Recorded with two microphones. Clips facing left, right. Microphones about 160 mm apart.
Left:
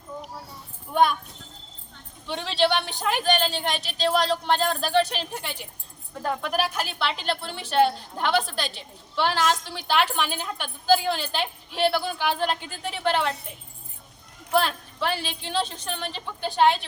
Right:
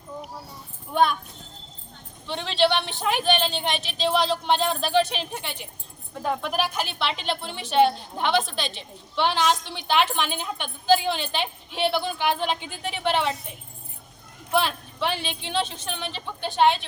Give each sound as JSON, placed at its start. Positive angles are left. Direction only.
{"t": 2.2, "sound": "a man's voice", "side_deg": 5}
{"t": 14.5, "sound": "a woman's voice", "side_deg": 0}